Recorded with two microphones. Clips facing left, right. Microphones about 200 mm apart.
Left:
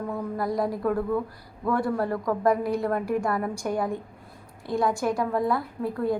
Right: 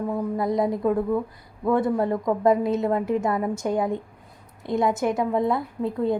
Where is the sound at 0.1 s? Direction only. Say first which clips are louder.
Right 3 dB; 20° right (ahead or behind).